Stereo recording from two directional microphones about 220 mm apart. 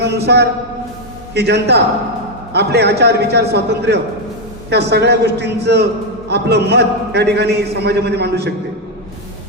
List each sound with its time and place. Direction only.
0.0 s a man's voice: 50° right (ahead or behind)